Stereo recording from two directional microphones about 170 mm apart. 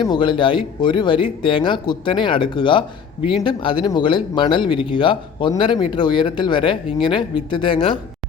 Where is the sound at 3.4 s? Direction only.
30° left (ahead or behind).